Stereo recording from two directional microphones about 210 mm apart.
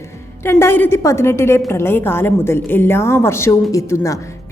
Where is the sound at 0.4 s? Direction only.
10° left (ahead or behind).